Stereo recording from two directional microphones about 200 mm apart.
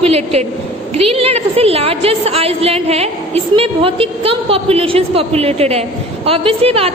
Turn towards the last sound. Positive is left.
turn(degrees=-30)  # may be behind; listen again after turning